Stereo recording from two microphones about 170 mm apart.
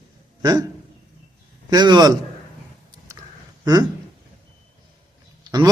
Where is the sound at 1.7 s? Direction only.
25° right (ahead or behind).